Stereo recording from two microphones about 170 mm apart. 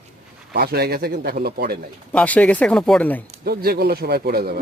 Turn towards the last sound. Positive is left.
turn(degrees=-65)  # may be behind; listen again after turning